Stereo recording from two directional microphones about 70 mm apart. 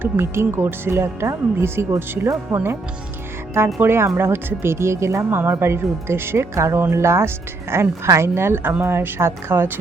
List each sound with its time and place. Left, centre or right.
0.0 s speech: right
3.8 s speech: right